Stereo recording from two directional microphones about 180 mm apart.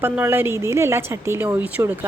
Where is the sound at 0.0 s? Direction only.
10° right (ahead or behind).